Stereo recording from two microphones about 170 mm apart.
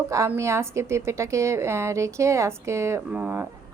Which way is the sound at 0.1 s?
15° right (ahead or behind).